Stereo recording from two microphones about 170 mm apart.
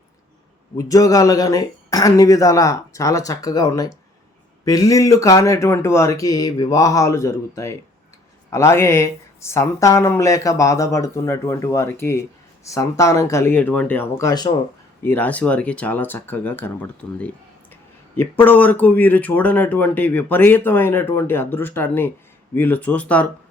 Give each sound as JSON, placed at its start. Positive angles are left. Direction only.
{"t": 0.8, "sound": "speech", "side_deg": 20}
{"t": 15.0, "sound": "speech", "side_deg": 10}